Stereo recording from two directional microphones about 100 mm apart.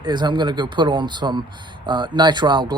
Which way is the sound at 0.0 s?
50° right (ahead or behind).